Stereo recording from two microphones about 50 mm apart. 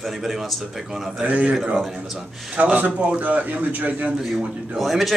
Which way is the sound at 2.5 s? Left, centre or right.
Right.